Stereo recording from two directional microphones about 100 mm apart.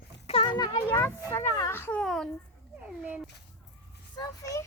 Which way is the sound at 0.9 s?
25° left (ahead or behind).